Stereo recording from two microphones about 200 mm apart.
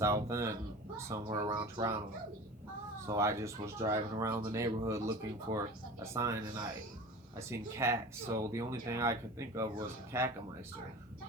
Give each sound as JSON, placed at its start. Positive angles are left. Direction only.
{"t": 0.0, "sound": "speech", "side_deg": -15}
{"t": 3.1, "sound": "speech", "side_deg": -15}